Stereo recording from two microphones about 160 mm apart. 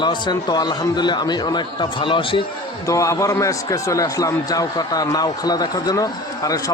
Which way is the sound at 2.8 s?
20° left (ahead or behind).